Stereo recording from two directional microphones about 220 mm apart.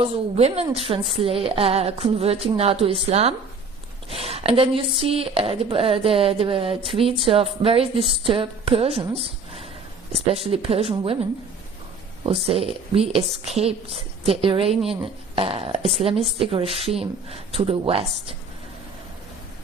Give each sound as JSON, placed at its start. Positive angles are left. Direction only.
{"t": 0.0, "sound": "a woman's voice", "side_deg": -30}
{"t": 12.2, "sound": "a woman's voice", "side_deg": -25}